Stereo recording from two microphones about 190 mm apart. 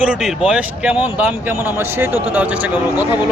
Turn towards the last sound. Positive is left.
turn(degrees=-10)  # may be behind; listen again after turning